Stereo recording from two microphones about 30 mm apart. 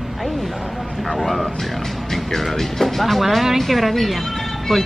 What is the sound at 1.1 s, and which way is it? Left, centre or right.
Speech, centre.